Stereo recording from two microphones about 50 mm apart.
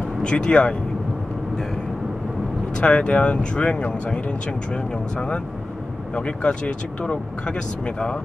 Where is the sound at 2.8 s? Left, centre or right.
Left.